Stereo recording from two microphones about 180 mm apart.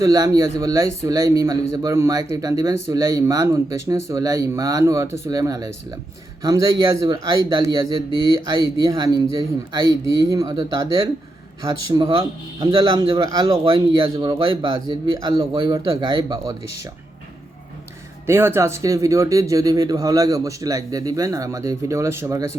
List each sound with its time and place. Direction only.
0.0 s a man's voice: 20° right (ahead or behind)
18.3 s speech: 15° right (ahead or behind)